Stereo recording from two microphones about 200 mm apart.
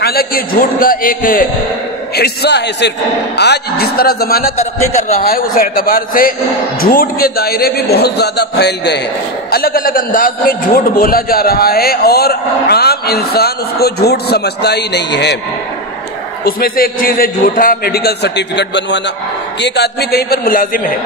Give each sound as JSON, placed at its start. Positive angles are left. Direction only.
{"t": 0.0, "sound": "a man's voice", "side_deg": 50}
{"t": 4.6, "sound": "a man's voice", "side_deg": 35}
{"t": 5.2, "sound": "a man's voice", "side_deg": 45}
{"t": 16.4, "sound": "a man's voice", "side_deg": 50}